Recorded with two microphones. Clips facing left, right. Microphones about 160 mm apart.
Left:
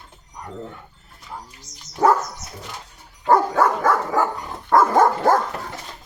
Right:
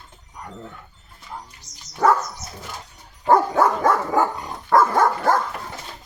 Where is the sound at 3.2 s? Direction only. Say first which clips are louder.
Even; 15° right (ahead or behind).